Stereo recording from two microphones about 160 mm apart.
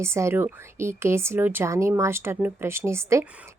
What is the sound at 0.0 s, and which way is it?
Speech, 15° right (ahead or behind).